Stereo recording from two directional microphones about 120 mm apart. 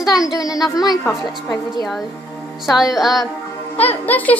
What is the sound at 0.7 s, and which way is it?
Speech, 30° left (ahead or behind).